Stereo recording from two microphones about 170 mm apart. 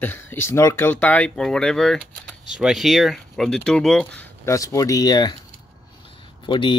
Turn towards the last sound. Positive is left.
turn(degrees=30)  # may be behind; listen again after turning